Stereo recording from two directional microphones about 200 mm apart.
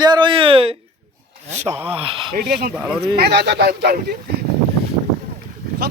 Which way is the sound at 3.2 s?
55° right (ahead or behind).